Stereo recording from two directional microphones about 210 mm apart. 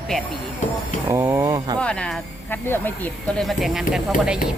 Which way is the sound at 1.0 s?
10° right (ahead or behind).